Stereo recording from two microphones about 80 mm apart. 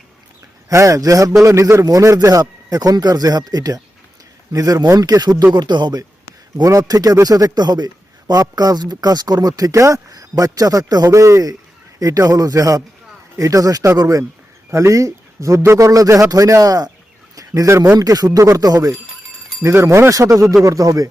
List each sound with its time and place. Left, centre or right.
0.7 s a man's voice: right
5.5 s speech: right
6.6 s speech: right
11.1 s a man's voice: right
19.6 s a man's voice: right